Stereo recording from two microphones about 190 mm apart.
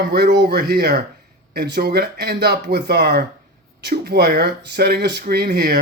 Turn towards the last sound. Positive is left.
turn(degrees=-55)  # may be behind; listen again after turning